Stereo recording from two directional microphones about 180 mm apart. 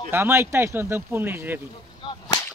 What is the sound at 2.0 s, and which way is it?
Whip, 30° left (ahead or behind).